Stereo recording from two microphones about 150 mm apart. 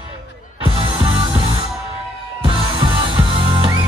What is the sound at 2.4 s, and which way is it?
Music, 35° right (ahead or behind).